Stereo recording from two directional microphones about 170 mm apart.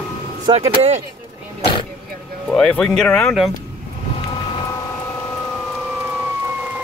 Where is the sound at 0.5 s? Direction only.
40° right (ahead or behind).